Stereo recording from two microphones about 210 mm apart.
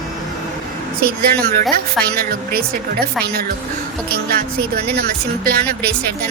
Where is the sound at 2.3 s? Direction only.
45° right (ahead or behind).